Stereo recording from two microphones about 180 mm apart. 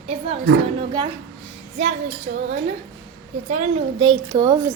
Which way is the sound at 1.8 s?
35° right (ahead or behind).